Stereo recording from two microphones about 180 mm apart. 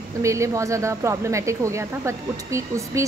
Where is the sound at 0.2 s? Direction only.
15° right (ahead or behind).